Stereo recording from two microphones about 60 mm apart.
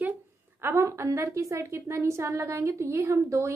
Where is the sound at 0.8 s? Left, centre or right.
Right.